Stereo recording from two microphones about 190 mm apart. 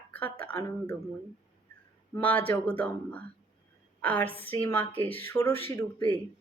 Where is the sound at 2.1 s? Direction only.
10° left (ahead or behind).